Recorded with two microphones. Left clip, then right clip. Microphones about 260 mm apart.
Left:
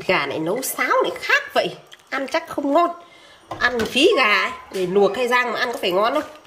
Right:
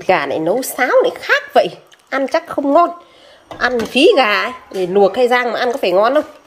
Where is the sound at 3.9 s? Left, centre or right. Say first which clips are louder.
Right 5 dB; centre.